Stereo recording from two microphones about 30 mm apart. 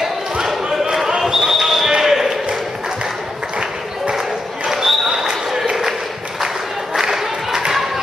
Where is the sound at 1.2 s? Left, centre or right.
Centre.